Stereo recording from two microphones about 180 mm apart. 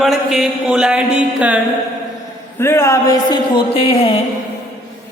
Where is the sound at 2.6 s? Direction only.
15° left (ahead or behind); by 4.1 s 30° left (ahead or behind).